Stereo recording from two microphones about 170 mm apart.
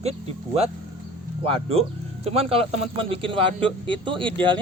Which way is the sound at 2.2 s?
35° right (ahead or behind).